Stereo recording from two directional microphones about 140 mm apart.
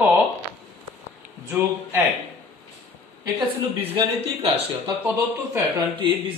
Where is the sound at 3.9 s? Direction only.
45° right (ahead or behind).